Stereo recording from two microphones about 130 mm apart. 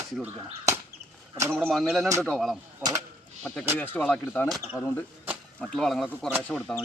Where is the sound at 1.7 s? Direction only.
Centre (ahead or behind); by 5.0 s 20° left (ahead or behind).